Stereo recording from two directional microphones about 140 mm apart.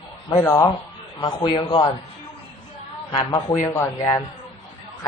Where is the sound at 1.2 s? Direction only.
40° left (ahead or behind).